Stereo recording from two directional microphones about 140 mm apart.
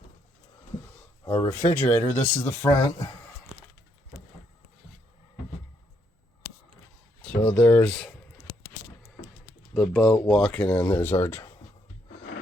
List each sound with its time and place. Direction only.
1.2 s speech: 15° left (ahead or behind)
7.4 s speech: 10° left (ahead or behind)
9.7 s speech: centre (ahead or behind)